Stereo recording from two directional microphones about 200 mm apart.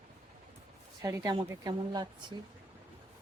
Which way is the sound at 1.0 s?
15° right (ahead or behind).